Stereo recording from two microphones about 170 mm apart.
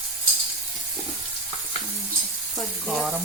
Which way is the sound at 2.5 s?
Centre (ahead or behind).